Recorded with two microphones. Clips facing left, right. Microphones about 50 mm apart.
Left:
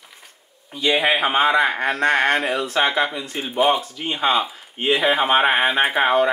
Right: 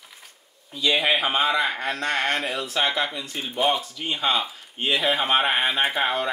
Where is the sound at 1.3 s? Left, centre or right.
Left.